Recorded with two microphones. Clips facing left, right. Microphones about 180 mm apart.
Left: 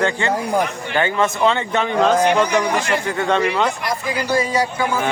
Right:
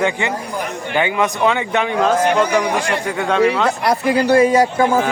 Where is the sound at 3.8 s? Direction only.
65° right (ahead or behind); by 4.9 s 50° right (ahead or behind).